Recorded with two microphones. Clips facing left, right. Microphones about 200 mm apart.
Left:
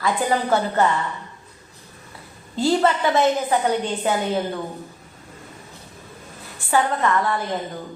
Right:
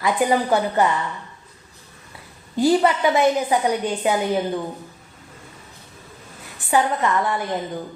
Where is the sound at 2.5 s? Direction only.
15° right (ahead or behind).